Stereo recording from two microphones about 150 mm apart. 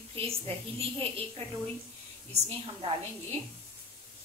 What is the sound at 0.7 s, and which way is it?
Speech, 40° right (ahead or behind).